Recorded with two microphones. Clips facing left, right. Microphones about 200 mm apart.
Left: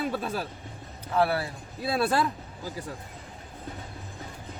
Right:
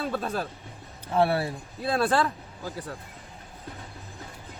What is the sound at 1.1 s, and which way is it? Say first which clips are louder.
Speech: right 2 dB; 25° right (ahead or behind).